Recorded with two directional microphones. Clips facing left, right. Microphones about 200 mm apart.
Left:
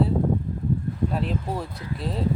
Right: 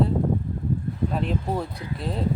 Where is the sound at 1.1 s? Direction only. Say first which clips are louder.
Right 4 dB; centre (ahead or behind).